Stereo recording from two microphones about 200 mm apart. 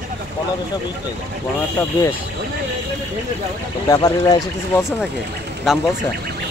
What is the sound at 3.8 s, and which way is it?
Speech, 20° left (ahead or behind).